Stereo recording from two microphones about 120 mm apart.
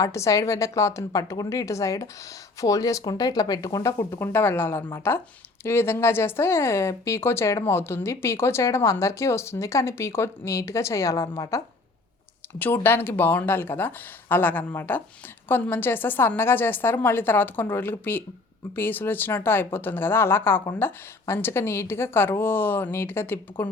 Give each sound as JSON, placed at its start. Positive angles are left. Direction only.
{"t": 0.0, "sound": "speech", "side_deg": 25}
{"t": 4.1, "sound": "speech", "side_deg": 20}